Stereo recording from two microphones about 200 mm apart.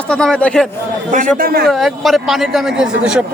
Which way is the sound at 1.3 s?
50° right (ahead or behind).